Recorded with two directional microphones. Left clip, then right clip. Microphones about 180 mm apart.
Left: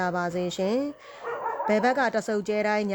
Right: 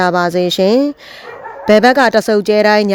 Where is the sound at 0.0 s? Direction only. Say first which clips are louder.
Right 15 dB; 50° right (ahead or behind).